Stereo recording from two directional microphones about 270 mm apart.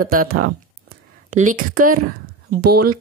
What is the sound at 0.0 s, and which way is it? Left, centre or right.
Speech, right.